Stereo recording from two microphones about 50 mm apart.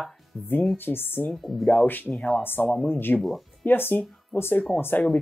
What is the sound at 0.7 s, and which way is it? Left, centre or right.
Speech, left.